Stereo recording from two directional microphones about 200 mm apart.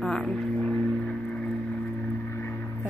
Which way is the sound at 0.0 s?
5° left (ahead or behind).